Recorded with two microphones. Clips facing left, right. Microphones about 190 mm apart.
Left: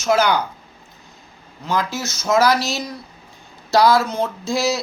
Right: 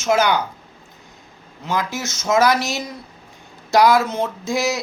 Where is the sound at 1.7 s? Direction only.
20° right (ahead or behind).